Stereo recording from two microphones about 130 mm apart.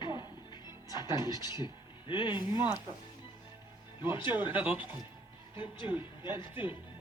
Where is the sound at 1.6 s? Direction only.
40° left (ahead or behind).